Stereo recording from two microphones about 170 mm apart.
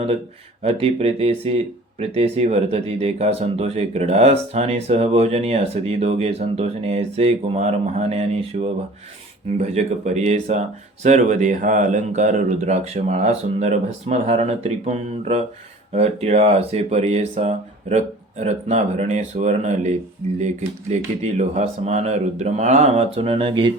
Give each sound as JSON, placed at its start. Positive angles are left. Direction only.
{"t": 0.6, "sound": "speech", "side_deg": -35}
{"t": 20.9, "sound": "speech", "side_deg": -40}